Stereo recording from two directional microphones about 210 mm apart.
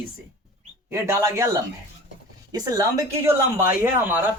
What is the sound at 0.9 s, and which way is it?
Speech, 15° right (ahead or behind).